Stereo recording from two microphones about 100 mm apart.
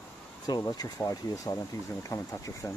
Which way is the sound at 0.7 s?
40° left (ahead or behind).